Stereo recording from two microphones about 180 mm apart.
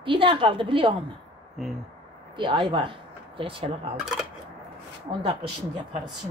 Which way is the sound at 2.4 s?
25° right (ahead or behind).